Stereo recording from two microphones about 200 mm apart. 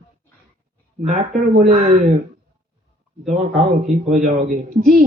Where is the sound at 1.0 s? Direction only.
35° right (ahead or behind).